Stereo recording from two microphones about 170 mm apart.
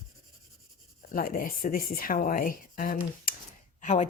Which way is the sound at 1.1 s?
55° left (ahead or behind).